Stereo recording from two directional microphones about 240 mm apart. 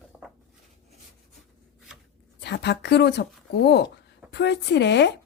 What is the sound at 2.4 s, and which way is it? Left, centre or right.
Speech, left.